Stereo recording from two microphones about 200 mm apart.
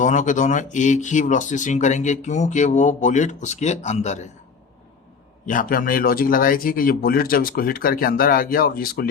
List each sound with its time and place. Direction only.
0.0 s speech: 40° left (ahead or behind)
5.5 s a man's voice: 45° left (ahead or behind)